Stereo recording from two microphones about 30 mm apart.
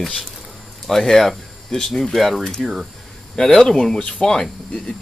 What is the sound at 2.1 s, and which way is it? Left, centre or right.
Speech, centre.